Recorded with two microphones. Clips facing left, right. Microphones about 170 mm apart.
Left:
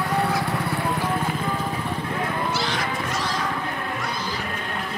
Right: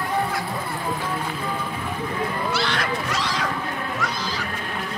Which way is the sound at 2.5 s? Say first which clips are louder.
Right 1 dB; 70° right (ahead or behind).